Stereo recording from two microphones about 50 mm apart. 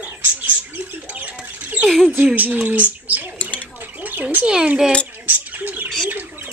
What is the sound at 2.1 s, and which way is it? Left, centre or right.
Speech, right.